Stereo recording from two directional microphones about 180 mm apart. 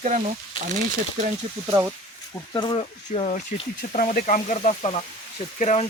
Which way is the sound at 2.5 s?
25° left (ahead or behind).